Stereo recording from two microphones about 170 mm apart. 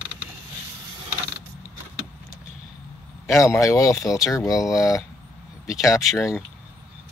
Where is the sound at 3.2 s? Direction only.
15° left (ahead or behind).